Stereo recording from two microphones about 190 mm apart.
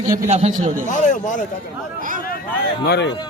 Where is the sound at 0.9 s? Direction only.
40° left (ahead or behind).